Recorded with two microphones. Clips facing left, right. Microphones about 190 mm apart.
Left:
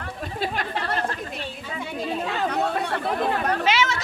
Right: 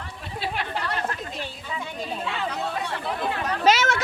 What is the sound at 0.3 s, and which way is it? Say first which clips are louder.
Chatter: left 1 dB; 45° left (ahead or behind).